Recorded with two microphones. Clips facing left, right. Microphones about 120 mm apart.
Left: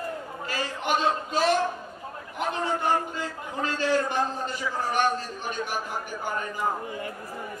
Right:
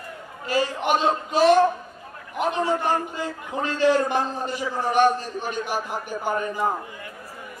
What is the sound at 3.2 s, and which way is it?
A man's voice, 20° right (ahead or behind).